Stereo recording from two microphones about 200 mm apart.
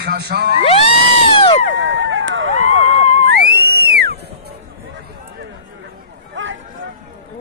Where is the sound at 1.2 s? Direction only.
30° left (ahead or behind).